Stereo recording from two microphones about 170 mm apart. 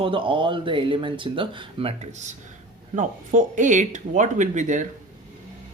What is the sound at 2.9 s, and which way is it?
Speech, 45° right (ahead or behind).